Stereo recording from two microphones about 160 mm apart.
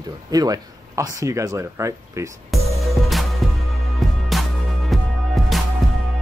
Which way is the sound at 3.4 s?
Centre (ahead or behind).